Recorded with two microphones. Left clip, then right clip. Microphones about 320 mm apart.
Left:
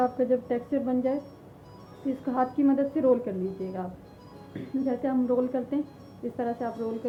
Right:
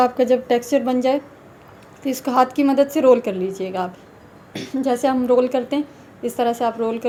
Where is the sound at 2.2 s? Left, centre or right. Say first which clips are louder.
Right 9 dB; centre.